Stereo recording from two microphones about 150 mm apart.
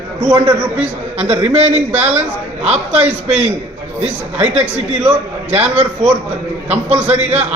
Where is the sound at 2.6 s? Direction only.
45° right (ahead or behind).